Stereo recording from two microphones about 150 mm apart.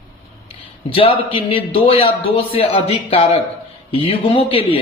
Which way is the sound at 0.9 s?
35° left (ahead or behind).